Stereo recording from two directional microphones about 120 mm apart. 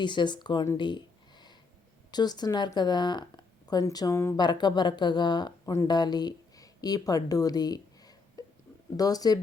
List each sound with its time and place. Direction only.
0.0 s speech: 40° left (ahead or behind)
0.8 s a sound: 40° left (ahead or behind)
2.0 s speech: 35° left (ahead or behind)
4.4 s speech: 40° left (ahead or behind)